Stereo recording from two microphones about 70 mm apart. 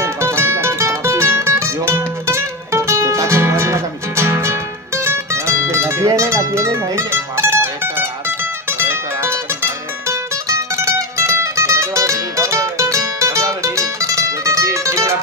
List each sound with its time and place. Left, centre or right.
0.0 s music: right